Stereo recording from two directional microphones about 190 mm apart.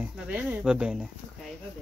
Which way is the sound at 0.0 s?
10° right (ahead or behind).